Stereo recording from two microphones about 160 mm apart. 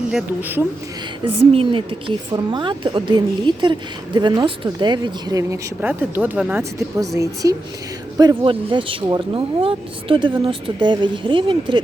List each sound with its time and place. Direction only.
0.1 s speech: 10° right (ahead or behind)
1.2 s a woman's voice: 35° right (ahead or behind)